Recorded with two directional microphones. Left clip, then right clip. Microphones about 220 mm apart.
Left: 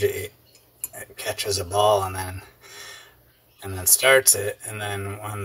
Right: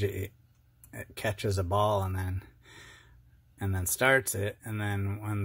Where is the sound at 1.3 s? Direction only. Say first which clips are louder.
Left 8 dB; 30° right (ahead or behind).